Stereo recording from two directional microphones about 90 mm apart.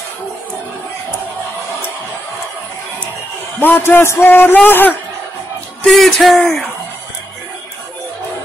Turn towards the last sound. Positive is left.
turn(degrees=0)  # may be behind; listen again after turning